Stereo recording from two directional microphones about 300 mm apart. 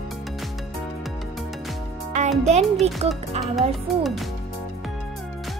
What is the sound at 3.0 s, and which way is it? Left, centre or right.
Speech, right.